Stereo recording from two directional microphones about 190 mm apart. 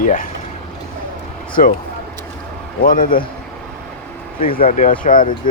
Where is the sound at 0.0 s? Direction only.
45° left (ahead or behind).